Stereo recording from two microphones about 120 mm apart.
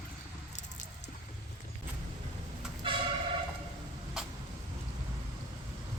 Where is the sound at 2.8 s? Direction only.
45° right (ahead or behind).